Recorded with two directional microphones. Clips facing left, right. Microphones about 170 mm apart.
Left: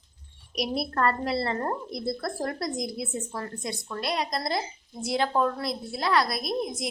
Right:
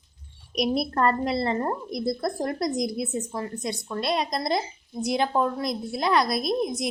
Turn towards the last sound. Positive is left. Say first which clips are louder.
# right 4 dB
turn(degrees=-20)  # may be behind; listen again after turning